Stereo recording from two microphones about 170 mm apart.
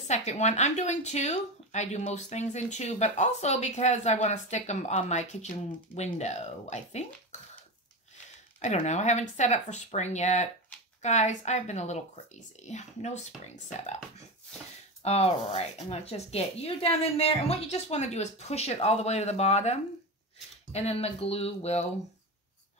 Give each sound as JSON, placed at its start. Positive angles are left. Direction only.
{"t": 0.1, "sound": "speech", "side_deg": 40}
{"t": 7.3, "sound": "a sound", "side_deg": 45}
{"t": 8.5, "sound": "speech", "side_deg": 45}